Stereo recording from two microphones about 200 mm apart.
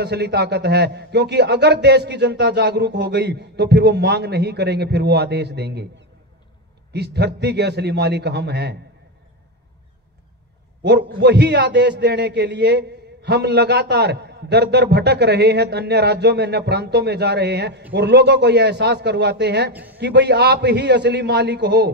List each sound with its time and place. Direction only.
0.0 s a man's voice: 55° right (ahead or behind)
10.8 s a man's voice: 55° right (ahead or behind)
19.7 s a man's voice: 10° right (ahead or behind)
20.0 s a man's voice: 55° right (ahead or behind)